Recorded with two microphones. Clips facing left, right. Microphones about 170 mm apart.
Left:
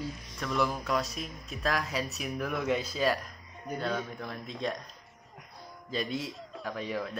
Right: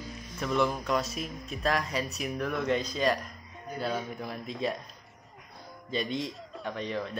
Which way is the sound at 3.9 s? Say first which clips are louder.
Right 1 dB; 5° right (ahead or behind).